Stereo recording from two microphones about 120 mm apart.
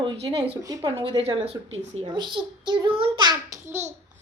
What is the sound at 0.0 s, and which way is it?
Speech, 45° right (ahead or behind).